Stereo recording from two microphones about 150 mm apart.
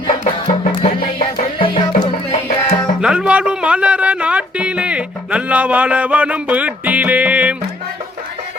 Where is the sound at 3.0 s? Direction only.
5° right (ahead or behind).